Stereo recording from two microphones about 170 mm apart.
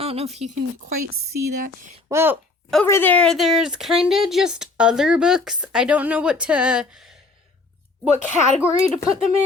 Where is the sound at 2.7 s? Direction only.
10° left (ahead or behind); by 6.8 s 5° right (ahead or behind).